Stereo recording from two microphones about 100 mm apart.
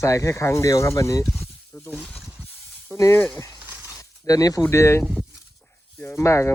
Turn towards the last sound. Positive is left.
turn(degrees=30)  # may be behind; listen again after turning